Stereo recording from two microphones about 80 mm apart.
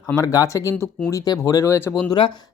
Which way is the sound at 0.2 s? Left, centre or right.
Left.